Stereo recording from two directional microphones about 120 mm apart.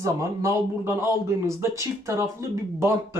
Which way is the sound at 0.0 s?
25° right (ahead or behind).